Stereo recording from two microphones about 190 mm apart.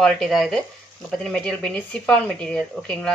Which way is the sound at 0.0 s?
Centre (ahead or behind).